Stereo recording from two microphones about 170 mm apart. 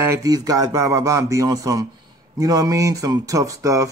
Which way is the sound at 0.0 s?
20° right (ahead or behind).